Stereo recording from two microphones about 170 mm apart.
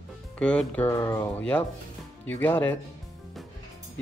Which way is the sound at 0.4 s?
5° left (ahead or behind).